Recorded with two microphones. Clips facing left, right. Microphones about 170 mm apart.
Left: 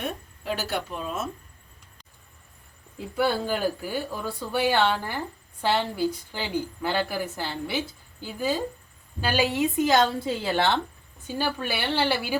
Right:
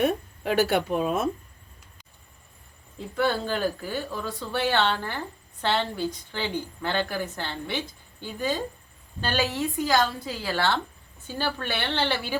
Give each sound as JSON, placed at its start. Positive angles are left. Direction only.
{"t": 0.4, "sound": "speech", "side_deg": -60}
{"t": 3.2, "sound": "a woman's voice", "side_deg": 10}